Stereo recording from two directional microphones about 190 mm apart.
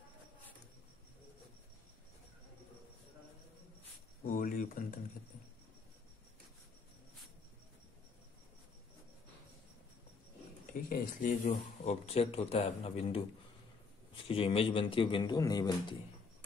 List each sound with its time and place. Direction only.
4.3 s speech: 45° left (ahead or behind)
10.7 s a man's voice: 45° left (ahead or behind); by 16.0 s 20° left (ahead or behind)